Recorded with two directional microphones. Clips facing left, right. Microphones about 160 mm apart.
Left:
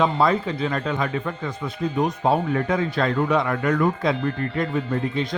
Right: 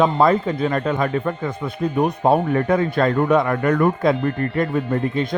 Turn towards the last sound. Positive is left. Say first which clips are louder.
# right 3 dB
turn(degrees=-50)  # may be behind; listen again after turning